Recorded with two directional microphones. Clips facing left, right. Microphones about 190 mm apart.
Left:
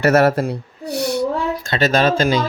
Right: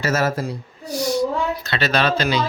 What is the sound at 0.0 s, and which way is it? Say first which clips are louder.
Speech: left 7 dB; 65° left (ahead or behind).